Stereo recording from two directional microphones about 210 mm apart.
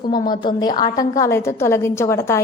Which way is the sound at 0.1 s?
20° left (ahead or behind).